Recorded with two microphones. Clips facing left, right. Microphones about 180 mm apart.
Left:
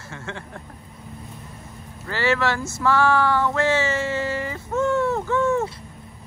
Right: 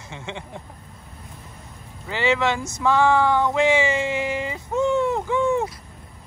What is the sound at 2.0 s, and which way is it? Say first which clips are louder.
Speech: right 1 dB; 15° right (ahead or behind).